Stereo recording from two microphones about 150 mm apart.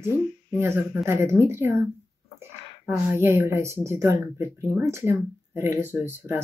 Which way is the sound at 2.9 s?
15° right (ahead or behind).